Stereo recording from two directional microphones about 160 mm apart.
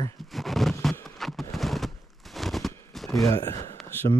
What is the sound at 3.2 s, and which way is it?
Speech, 20° left (ahead or behind).